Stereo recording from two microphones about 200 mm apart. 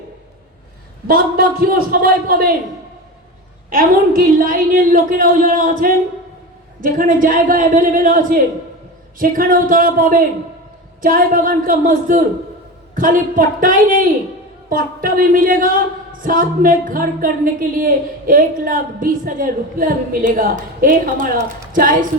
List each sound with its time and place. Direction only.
1.0 s speech: 45° right (ahead or behind)
3.7 s speech: 45° right (ahead or behind)